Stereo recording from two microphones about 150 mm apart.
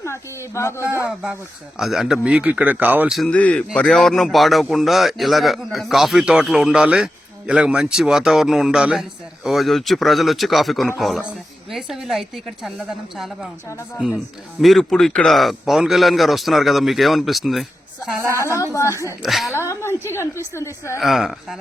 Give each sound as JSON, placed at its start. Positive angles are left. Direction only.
{"t": 0.0, "sound": "speech", "side_deg": 20}
{"t": 1.8, "sound": "speech", "side_deg": -5}
{"t": 3.2, "sound": "a man's voice", "side_deg": 5}
{"t": 13.7, "sound": "a woman's voice", "side_deg": 20}
{"t": 14.6, "sound": "a man's voice", "side_deg": 0}
{"t": 18.3, "sound": "a woman's voice", "side_deg": 20}
{"t": 19.2, "sound": "a man's voice", "side_deg": 0}
{"t": 19.5, "sound": "a woman's voice", "side_deg": 15}
{"t": 21.0, "sound": "a man's voice", "side_deg": 0}